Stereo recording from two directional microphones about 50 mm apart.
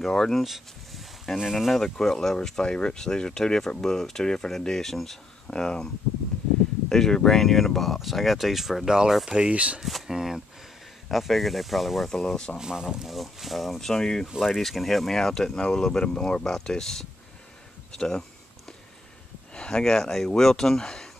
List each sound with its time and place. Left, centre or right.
0.0 s speech: centre
1.7 s speech: centre
6.9 s speech: centre
9.5 s speech: right
9.8 s speech: centre
12.1 s speech: centre
12.5 s speech: centre
13.1 s speech: centre
14.4 s speech: centre
19.5 s speech: centre